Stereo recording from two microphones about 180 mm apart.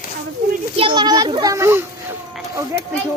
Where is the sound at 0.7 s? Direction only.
30° right (ahead or behind).